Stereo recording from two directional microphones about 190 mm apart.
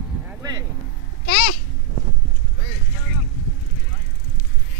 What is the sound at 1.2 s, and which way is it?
Speech, 50° left (ahead or behind).